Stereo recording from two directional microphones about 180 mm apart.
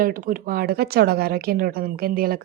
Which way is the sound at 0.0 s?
50° right (ahead or behind).